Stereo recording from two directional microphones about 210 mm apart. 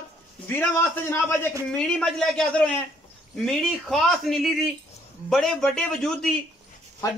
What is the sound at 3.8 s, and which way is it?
A man's voice, centre (ahead or behind).